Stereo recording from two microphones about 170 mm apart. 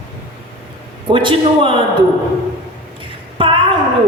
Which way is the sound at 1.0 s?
30° right (ahead or behind).